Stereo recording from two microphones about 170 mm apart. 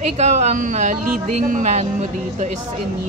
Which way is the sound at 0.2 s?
40° right (ahead or behind).